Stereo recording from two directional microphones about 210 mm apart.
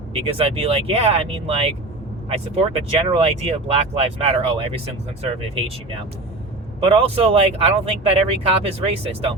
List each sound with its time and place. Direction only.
0.1 s speech: 25° right (ahead or behind)